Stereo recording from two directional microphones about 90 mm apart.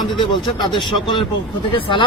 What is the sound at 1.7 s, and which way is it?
Speech, 75° left (ahead or behind).